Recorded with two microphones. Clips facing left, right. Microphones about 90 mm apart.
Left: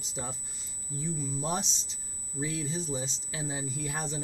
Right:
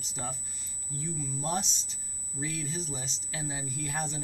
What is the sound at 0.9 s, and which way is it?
Speech, 15° left (ahead or behind).